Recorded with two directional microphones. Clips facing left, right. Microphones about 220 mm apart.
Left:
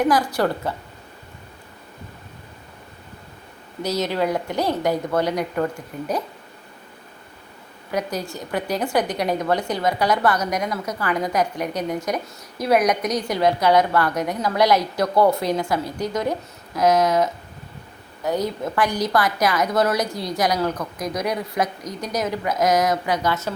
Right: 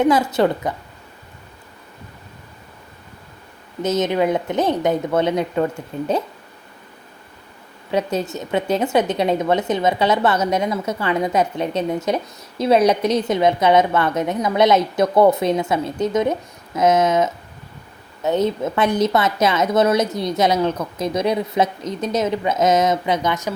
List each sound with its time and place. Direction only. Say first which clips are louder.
0.0 s a woman's voice: right 4 dB; 25° right (ahead or behind)
3.8 s a woman's voice: right 4 dB; 20° right (ahead or behind)
7.9 s a woman's voice: right 5 dB; 25° right (ahead or behind)